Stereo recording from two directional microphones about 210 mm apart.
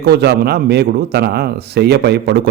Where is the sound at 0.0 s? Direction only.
50° right (ahead or behind).